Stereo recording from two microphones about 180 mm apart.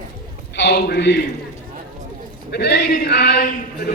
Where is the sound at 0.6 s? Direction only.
65° left (ahead or behind).